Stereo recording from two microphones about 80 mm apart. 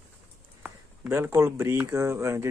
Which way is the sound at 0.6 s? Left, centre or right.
Right.